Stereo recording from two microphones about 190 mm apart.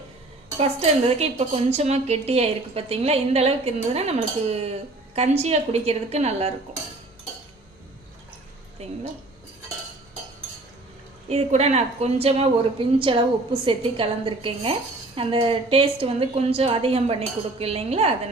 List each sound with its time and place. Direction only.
0.6 s a woman's voice: 30° right (ahead or behind)
8.8 s a woman's voice: 35° right (ahead or behind)
11.3 s a woman's voice: 35° right (ahead or behind)